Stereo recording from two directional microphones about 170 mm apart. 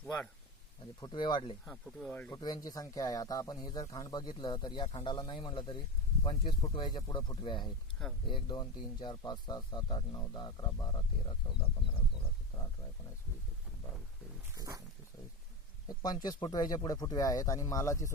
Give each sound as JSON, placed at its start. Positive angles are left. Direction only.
{"t": 1.0, "sound": "speech", "side_deg": 25}
{"t": 1.6, "sound": "speech", "side_deg": 5}
{"t": 2.3, "sound": "speech", "side_deg": 20}
{"t": 12.5, "sound": "speech", "side_deg": 30}
{"t": 14.5, "sound": "wild animals", "side_deg": -20}
{"t": 15.9, "sound": "speech", "side_deg": 25}